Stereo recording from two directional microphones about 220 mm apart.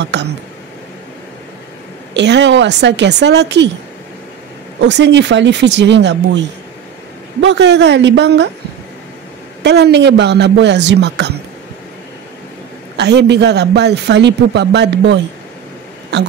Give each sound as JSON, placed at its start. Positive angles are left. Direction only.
{"t": 0.0, "sound": "a man's voice", "side_deg": -50}
{"t": 2.1, "sound": "a man's voice", "side_deg": -50}
{"t": 4.7, "sound": "a man's voice", "side_deg": -50}
{"t": 7.4, "sound": "a man's voice", "side_deg": -50}
{"t": 9.6, "sound": "a man's voice", "side_deg": -50}
{"t": 12.9, "sound": "a man's voice", "side_deg": -50}